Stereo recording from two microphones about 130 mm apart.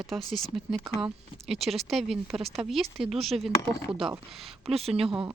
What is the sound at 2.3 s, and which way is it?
Speech, 50° right (ahead or behind).